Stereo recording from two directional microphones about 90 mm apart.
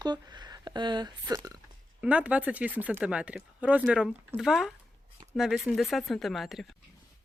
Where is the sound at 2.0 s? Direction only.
15° right (ahead or behind).